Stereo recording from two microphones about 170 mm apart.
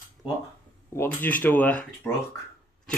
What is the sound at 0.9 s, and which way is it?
Speech, 15° left (ahead or behind).